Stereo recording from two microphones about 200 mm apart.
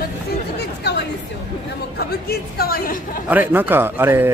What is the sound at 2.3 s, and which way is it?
Speech, 50° left (ahead or behind).